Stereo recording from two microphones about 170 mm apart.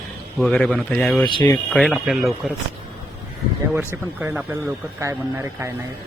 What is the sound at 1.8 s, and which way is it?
Speech, centre (ahead or behind).